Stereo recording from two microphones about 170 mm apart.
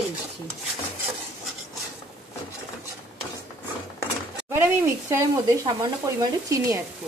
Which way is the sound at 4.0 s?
15° right (ahead or behind).